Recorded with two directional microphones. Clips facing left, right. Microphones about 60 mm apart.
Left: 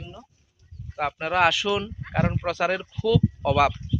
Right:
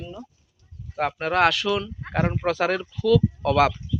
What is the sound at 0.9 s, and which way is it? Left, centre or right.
Speech, centre.